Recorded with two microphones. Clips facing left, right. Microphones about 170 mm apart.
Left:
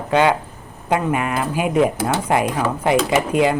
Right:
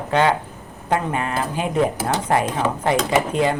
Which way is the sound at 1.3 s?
10° left (ahead or behind).